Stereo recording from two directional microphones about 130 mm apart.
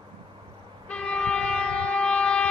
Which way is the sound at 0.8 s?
10° left (ahead or behind).